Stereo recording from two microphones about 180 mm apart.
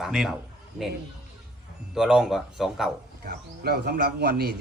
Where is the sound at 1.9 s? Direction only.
5° right (ahead or behind).